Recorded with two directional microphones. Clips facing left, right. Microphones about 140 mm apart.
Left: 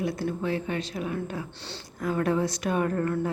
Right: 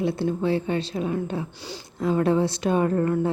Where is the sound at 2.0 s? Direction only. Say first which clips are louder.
Right 4 dB; 25° right (ahead or behind).